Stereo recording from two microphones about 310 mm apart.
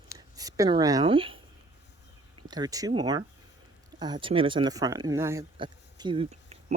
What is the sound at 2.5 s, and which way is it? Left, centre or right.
Speech, centre.